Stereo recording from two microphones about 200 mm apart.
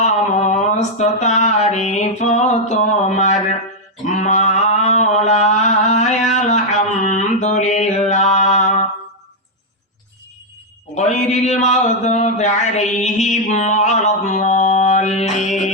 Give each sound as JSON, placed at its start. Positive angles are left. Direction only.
{"t": 0.0, "sound": "a sound", "side_deg": 35}
{"t": 4.1, "sound": "mantra", "side_deg": 35}
{"t": 10.9, "sound": "speech", "side_deg": 35}
{"t": 13.1, "sound": "music", "side_deg": 35}
{"t": 15.4, "sound": "speech", "side_deg": 35}